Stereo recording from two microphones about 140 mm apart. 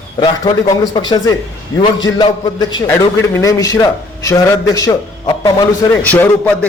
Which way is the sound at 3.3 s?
25° left (ahead or behind).